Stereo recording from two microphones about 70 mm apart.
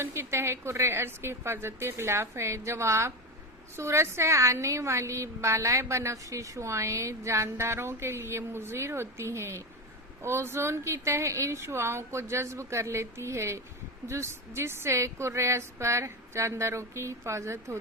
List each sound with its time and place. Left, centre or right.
0.0 s a woman's voice: right